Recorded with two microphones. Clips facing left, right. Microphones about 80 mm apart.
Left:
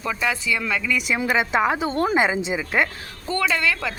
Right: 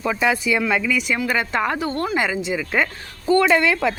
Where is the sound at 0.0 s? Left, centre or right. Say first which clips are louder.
Right 4 dB; centre.